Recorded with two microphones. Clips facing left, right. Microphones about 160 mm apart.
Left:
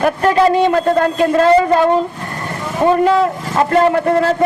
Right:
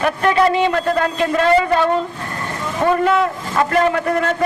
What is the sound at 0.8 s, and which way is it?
Speech, 30° left (ahead or behind).